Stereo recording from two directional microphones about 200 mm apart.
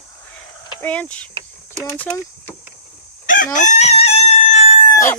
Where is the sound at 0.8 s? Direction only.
5° left (ahead or behind).